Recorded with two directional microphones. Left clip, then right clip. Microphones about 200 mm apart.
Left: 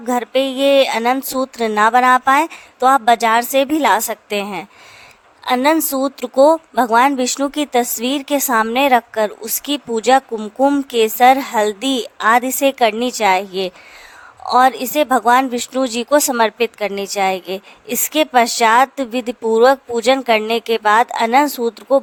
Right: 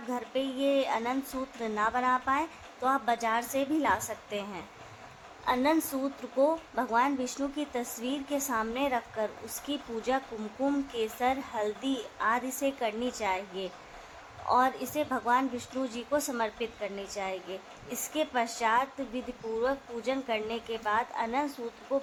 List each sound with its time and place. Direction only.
0.1 s a woman's voice: 55° left (ahead or behind)